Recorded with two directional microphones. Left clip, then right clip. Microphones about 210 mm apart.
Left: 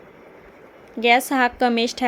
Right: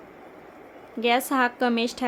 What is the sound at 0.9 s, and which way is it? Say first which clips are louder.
A woman's voice: left 5 dB; 15° left (ahead or behind).